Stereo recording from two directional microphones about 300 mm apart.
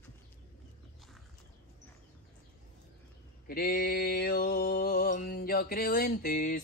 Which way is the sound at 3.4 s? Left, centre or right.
Left.